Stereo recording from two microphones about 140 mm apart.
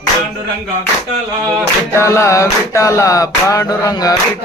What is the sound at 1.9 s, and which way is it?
Music, 20° left (ahead or behind).